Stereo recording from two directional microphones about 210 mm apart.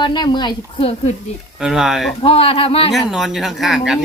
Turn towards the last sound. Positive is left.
turn(degrees=0)  # may be behind; listen again after turning